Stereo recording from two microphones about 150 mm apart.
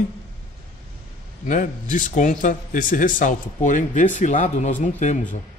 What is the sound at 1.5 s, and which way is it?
Speech, 60° left (ahead or behind).